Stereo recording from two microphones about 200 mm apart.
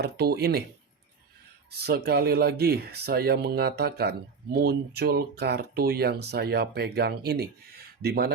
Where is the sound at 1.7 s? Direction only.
55° right (ahead or behind).